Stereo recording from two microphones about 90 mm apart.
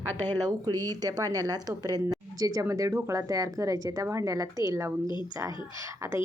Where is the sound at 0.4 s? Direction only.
45° right (ahead or behind).